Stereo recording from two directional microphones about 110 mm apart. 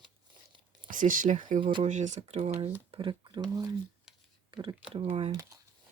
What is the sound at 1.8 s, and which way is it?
Speech, 90° right.